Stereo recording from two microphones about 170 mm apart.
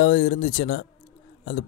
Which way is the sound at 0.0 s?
50° left (ahead or behind).